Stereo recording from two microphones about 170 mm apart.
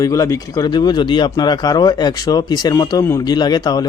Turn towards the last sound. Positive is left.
turn(degrees=25)  # may be behind; listen again after turning